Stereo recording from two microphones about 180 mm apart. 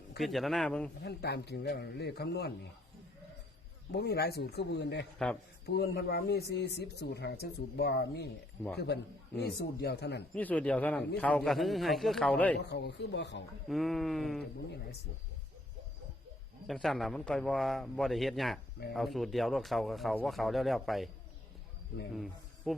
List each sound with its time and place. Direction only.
0.2 s speech: centre (ahead or behind)
1.0 s speech: 65° left (ahead or behind)
3.9 s speech: 65° left (ahead or behind)
10.3 s speech: 10° left (ahead or behind)
12.5 s speech: 65° left (ahead or behind)
13.7 s speech: centre (ahead or behind)
16.6 s speech: centre (ahead or behind)
22.1 s a man's voice: centre (ahead or behind)